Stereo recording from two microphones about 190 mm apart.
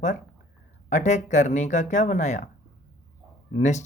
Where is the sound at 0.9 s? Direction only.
40° left (ahead or behind).